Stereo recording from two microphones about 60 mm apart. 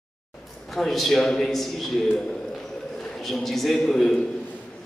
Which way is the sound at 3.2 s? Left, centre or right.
Centre.